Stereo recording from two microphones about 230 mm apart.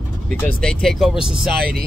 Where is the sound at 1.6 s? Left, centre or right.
Right.